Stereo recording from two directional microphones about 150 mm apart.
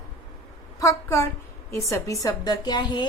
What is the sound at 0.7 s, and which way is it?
A woman's voice, 20° left (ahead or behind).